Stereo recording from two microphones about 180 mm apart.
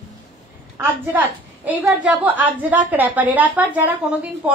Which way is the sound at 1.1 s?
10° right (ahead or behind).